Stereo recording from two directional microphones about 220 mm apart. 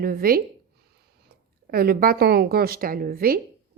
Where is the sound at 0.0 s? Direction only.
40° right (ahead or behind).